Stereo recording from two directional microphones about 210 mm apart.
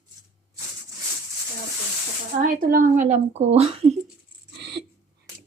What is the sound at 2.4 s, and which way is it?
Speech, 40° right (ahead or behind).